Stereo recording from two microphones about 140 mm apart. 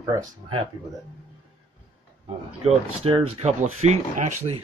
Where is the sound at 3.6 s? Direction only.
60° right (ahead or behind).